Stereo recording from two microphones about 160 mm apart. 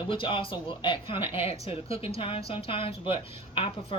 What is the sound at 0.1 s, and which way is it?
A woman's voice, 30° left (ahead or behind).